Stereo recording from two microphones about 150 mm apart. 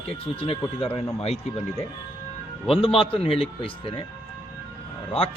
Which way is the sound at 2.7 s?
35° left (ahead or behind).